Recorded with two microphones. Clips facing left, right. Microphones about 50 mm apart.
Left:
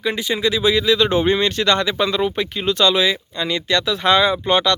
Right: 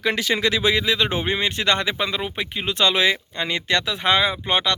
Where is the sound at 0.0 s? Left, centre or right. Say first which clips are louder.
Even; right.